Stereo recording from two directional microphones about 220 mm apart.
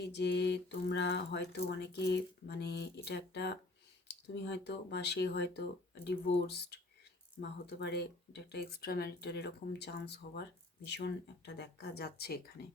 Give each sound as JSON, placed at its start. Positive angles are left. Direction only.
{"t": 0.0, "sound": "speech", "side_deg": 50}